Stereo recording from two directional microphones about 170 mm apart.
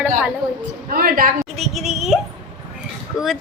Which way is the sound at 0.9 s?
60° right (ahead or behind).